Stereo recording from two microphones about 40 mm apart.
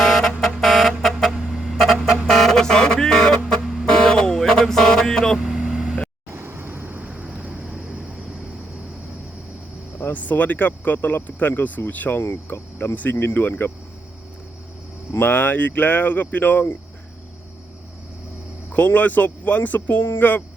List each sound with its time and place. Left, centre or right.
0.0 s buzzer: centre
0.6 s a sound: centre
1.3 s music: centre
3.4 s a sound: centre
3.8 s a sound: centre
5.4 s vehicle: centre
6.3 s vehicle: right
6.7 s vehicle: right
7.0 s vehicle: right
7.6 s vehicle: centre
10.0 s speech: left
15.3 s speech: left
18.9 s speech: left